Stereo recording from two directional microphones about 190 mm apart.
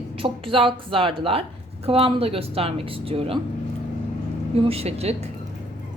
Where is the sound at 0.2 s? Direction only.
30° right (ahead or behind).